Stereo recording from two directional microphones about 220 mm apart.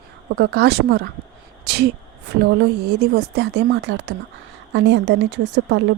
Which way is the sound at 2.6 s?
50° right (ahead or behind).